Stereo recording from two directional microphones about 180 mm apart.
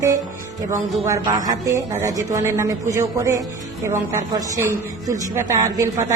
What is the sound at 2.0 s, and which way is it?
Speech, 20° right (ahead or behind).